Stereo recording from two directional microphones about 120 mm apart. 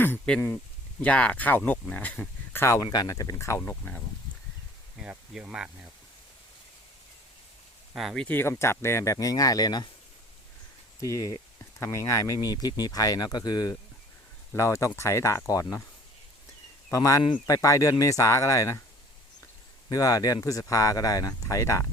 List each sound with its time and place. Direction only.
1.0 s speech: 10° left (ahead or behind)
4.9 s speech: 5° right (ahead or behind)
7.9 s speech: centre (ahead or behind)
8.4 s speech: 20° left (ahead or behind)
11.0 s speech: 25° left (ahead or behind)
16.9 s speech: 30° left (ahead or behind)
19.9 s speech: 30° left (ahead or behind)